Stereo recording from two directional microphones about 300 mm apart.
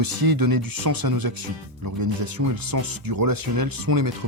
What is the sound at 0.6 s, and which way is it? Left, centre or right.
Speech, right.